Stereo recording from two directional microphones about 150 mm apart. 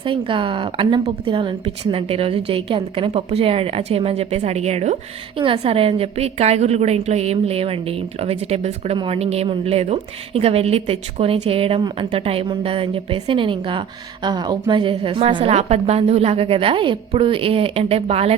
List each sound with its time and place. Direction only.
0.0 s a woman's voice: 35° right (ahead or behind)